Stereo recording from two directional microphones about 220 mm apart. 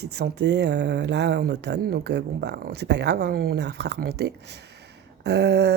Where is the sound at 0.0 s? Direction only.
50° right (ahead or behind).